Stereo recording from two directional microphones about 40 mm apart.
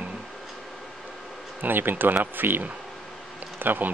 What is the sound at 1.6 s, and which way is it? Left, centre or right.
Speech, right.